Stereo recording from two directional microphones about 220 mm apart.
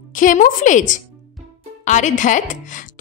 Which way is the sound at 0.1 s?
35° left (ahead or behind).